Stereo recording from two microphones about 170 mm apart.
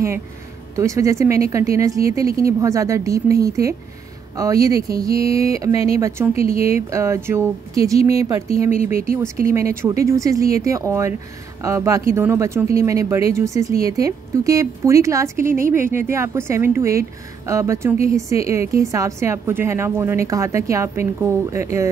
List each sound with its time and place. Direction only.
0.7 s a woman's voice: 20° right (ahead or behind)
6.3 s speech: 35° left (ahead or behind)
6.9 s a woman's voice: 15° right (ahead or behind)
8.0 s speech: 35° left (ahead or behind)
8.8 s a woman's voice: 15° right (ahead or behind)